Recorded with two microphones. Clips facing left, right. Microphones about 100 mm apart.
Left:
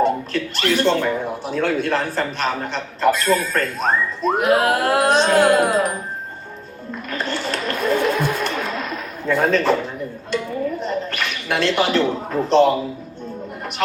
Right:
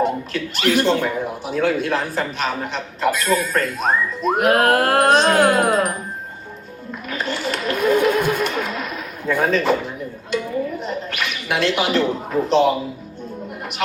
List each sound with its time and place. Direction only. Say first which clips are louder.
0.0 s speech: left 2 dB; 5° right (ahead or behind)
4.4 s music: right 2 dB; 55° right (ahead or behind)
7.1 s a sound: even; 5° right (ahead or behind)
10.3 s speech: even; 5° right (ahead or behind)